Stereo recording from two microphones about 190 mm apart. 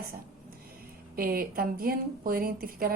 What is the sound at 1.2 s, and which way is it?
Speech, 50° right (ahead or behind).